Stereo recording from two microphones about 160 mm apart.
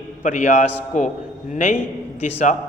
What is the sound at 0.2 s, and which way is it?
Speech, 50° left (ahead or behind).